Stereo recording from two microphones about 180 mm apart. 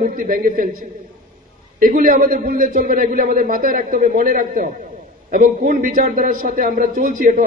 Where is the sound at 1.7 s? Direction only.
50° right (ahead or behind).